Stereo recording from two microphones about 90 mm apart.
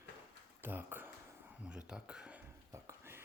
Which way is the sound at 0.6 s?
25° right (ahead or behind).